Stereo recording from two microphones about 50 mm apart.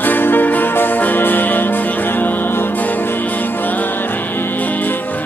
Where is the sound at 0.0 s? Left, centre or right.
Left.